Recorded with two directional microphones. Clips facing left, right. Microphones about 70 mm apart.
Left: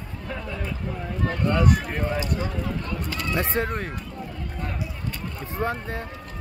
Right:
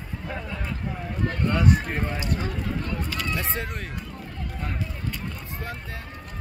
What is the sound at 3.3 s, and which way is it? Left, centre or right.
Speech, left.